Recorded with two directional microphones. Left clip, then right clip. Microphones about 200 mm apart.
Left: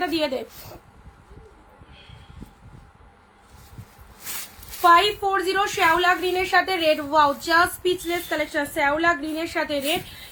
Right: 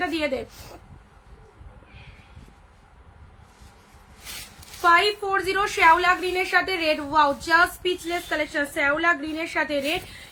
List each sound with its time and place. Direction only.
0.0 s a woman's voice: 10° right (ahead or behind)
4.8 s a woman's voice: 15° right (ahead or behind)